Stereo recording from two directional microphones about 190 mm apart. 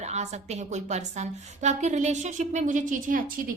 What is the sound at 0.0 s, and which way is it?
A woman's voice, 35° right (ahead or behind).